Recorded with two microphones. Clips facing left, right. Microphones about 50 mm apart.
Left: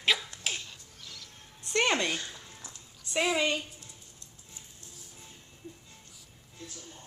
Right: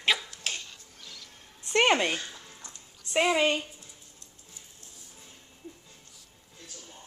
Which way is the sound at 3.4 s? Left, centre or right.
Centre.